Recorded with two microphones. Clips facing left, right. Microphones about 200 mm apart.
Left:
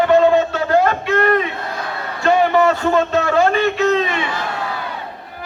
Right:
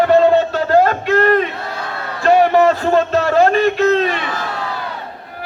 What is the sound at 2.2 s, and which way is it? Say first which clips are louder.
A man's voice: right 3 dB; 40° right (ahead or behind).